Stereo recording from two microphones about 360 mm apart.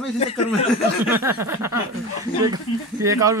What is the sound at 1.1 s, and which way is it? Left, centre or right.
Speech, centre.